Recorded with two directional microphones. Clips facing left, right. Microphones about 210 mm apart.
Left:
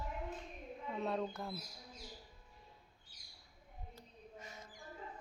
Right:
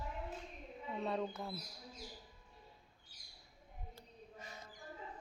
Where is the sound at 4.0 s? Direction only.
35° right (ahead or behind).